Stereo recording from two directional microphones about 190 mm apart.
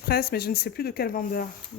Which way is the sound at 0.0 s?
55° left (ahead or behind).